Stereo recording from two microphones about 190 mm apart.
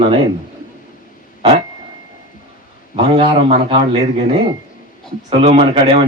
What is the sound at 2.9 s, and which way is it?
A man's voice, 30° right (ahead or behind).